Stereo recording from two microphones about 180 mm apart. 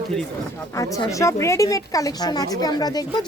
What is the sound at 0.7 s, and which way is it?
A woman's voice, 20° left (ahead or behind).